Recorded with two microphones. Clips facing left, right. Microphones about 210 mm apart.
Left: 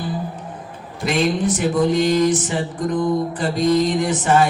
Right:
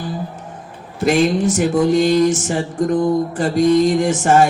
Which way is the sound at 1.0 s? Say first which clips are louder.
Right 4 dB; 45° right (ahead or behind).